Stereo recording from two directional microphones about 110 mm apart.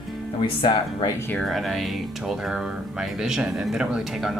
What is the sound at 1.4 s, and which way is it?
Speech, centre (ahead or behind).